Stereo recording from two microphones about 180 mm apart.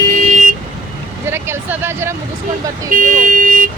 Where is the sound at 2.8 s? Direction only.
50° right (ahead or behind).